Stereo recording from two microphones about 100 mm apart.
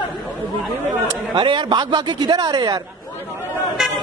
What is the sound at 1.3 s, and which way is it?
A man's voice, 50° right (ahead or behind).